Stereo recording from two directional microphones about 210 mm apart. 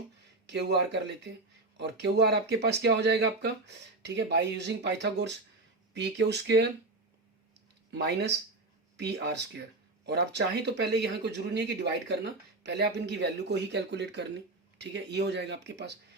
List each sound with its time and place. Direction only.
0.4 s speech: 55° right (ahead or behind)
7.9 s speech: 55° right (ahead or behind)